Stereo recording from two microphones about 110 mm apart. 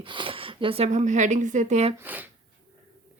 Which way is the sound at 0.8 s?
90° right.